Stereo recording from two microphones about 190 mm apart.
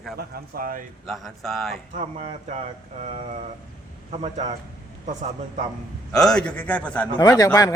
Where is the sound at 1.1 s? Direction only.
Centre (ahead or behind).